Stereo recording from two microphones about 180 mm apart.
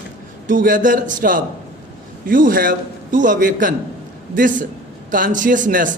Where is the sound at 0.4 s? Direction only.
50° right (ahead or behind).